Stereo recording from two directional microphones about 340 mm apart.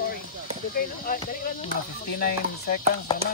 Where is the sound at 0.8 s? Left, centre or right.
Left.